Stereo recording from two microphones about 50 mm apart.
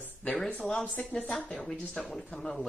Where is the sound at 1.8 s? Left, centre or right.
Centre.